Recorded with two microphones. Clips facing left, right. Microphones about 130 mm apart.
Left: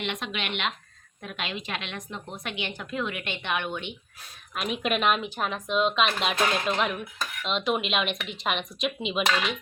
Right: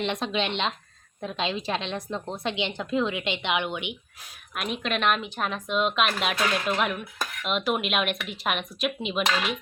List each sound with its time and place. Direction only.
0.0 s speech: 35° right (ahead or behind); by 4.3 s 15° right (ahead or behind)
4.5 s speech: centre (ahead or behind)